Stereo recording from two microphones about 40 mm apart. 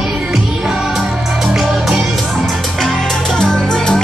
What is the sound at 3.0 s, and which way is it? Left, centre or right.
Music, centre.